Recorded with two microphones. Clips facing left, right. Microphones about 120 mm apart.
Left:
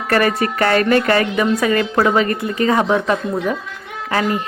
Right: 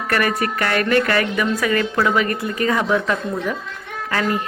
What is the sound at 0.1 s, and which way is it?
A woman's voice, 30° left (ahead or behind).